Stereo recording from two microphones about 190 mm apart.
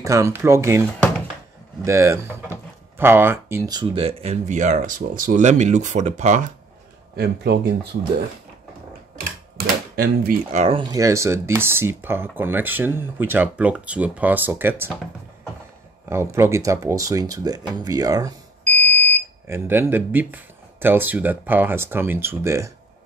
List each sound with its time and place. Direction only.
0.0 s speech: 15° right (ahead or behind)
1.9 s speech: 15° right (ahead or behind); by 6.4 s 40° right (ahead or behind)
7.2 s speech: 60° right (ahead or behind)
9.9 s speech: 50° right (ahead or behind)
10.5 s speech: 30° right (ahead or behind); by 14.9 s 10° right (ahead or behind)
16.1 s speech: 15° right (ahead or behind)
18.9 s smoke detector: 10° left (ahead or behind)
19.4 s speech: 15° right (ahead or behind)